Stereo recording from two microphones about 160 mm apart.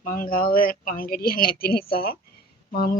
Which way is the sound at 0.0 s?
60° left (ahead or behind).